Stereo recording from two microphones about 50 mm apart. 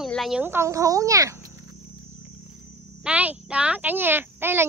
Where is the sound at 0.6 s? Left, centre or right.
Right.